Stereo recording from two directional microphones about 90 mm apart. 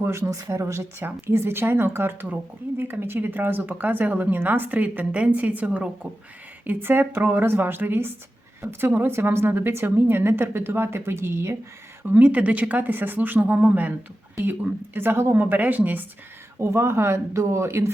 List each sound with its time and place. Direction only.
0.0 s speech: 30° right (ahead or behind)
16.6 s speech: 30° right (ahead or behind)